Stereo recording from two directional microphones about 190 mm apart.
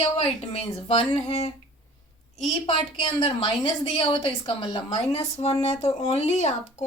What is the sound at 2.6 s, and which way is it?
A woman's voice, 30° left (ahead or behind).